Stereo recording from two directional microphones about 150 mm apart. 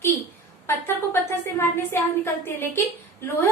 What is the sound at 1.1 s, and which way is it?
A woman's voice, 15° left (ahead or behind).